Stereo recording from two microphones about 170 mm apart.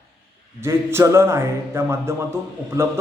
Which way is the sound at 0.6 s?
15° right (ahead or behind).